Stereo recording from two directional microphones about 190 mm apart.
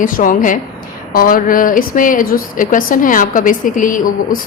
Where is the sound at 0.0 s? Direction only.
45° left (ahead or behind).